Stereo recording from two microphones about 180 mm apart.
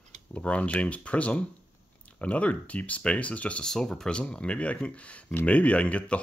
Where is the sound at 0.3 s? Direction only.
5° left (ahead or behind).